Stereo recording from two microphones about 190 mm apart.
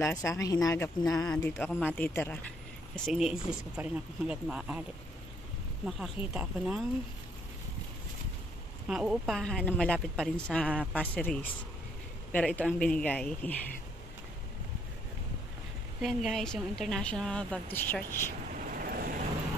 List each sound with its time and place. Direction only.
0.0 s speech: 15° left (ahead or behind)
3.1 s a woman's voice: 5° right (ahead or behind)
5.9 s a woman's voice: centre (ahead or behind)
8.8 s a woman's voice: 5° right (ahead or behind)
11.0 s speech: 10° left (ahead or behind)
16.0 s a woman's voice: centre (ahead or behind)
18.8 s vehicle: 50° right (ahead or behind)